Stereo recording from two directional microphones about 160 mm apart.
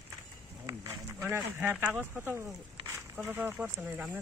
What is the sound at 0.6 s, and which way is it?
Speech, 20° right (ahead or behind).